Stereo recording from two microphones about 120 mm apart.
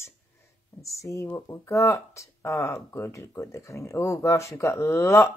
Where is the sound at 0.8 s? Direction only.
25° left (ahead or behind).